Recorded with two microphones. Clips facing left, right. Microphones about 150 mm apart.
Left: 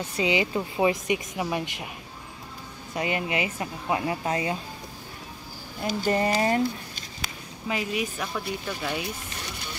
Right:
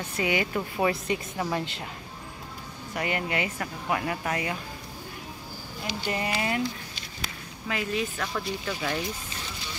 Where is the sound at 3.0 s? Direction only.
20° left (ahead or behind).